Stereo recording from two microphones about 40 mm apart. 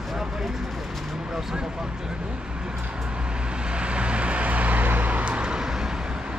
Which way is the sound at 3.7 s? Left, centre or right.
Right.